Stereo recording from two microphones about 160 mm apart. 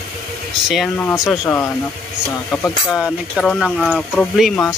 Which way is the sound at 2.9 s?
Centre (ahead or behind).